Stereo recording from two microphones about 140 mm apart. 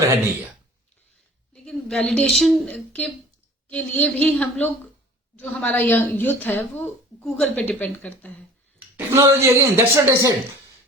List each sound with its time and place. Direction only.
1.5 s a woman's voice: 5° left (ahead or behind)
9.0 s a woman's voice: 20° right (ahead or behind)